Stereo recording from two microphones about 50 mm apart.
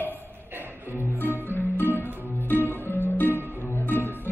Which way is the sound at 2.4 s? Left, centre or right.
Left.